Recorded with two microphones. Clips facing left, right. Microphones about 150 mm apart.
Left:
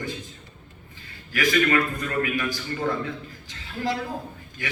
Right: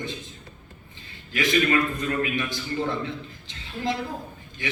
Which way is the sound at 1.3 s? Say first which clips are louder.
Left 1 dB; 25° right (ahead or behind).